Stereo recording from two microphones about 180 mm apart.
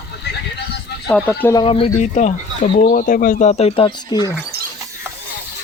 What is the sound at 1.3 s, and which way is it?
Speech, 15° left (ahead or behind).